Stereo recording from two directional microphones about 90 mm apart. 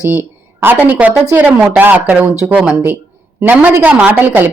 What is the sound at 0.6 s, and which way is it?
Speech, 20° right (ahead or behind).